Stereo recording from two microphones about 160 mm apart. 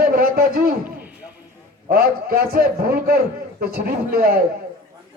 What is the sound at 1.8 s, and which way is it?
A man's voice, 70° right (ahead or behind).